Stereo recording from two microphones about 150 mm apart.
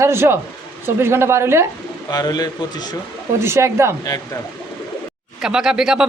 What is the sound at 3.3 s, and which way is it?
Speech, 20° right (ahead or behind).